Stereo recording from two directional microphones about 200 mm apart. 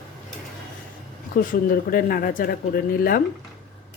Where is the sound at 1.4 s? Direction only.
45° left (ahead or behind).